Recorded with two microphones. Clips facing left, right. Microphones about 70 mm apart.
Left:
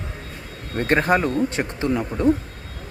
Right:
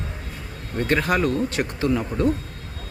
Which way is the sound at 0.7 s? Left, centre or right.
Left.